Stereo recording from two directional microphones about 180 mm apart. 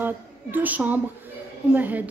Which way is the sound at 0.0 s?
10° right (ahead or behind).